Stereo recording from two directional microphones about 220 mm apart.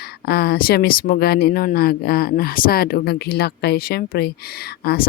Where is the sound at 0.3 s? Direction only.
45° left (ahead or behind).